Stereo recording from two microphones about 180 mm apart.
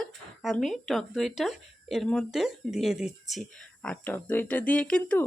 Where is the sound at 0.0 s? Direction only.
Centre (ahead or behind).